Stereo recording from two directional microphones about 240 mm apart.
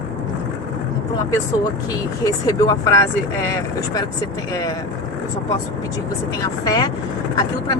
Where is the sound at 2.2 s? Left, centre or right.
Centre.